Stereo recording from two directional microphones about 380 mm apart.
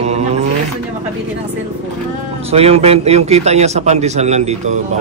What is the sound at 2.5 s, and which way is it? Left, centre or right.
A man's voice, centre.